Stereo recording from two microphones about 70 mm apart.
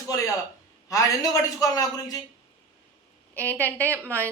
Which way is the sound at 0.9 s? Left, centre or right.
Left.